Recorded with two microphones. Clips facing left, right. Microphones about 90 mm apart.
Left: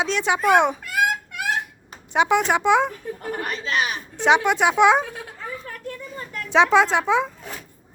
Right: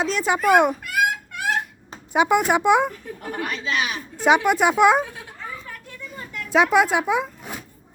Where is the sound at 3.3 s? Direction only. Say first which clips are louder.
Even; 35° left (ahead or behind).